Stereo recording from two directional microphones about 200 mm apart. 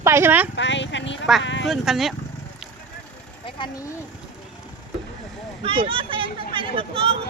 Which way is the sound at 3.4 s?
25° left (ahead or behind).